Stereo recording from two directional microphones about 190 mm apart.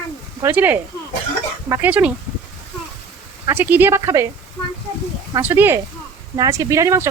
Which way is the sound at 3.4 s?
10° right (ahead or behind).